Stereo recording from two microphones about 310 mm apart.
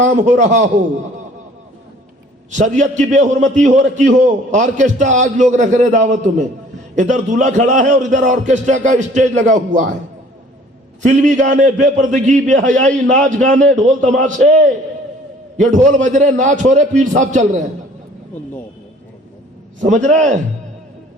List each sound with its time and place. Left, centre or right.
0.0 s a man's voice: right
2.5 s a man's voice: right
11.0 s a man's voice: right
19.8 s a man's voice: right